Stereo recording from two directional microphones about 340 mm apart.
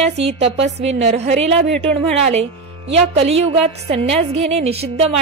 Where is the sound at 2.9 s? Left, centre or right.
Centre.